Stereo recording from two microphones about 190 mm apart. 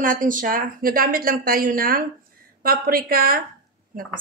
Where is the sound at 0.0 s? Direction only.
45° right (ahead or behind).